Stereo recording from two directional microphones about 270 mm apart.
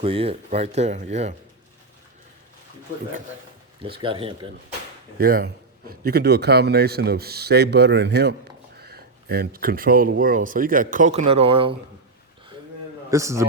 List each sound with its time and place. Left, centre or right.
0.0 s speech: right
4.0 s speech: centre
5.1 s speech: right
13.1 s a man's voice: centre